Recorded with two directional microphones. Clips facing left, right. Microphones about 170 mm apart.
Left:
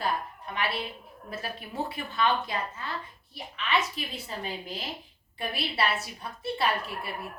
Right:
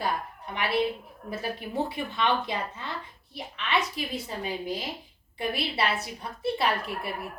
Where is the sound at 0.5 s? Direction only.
15° right (ahead or behind).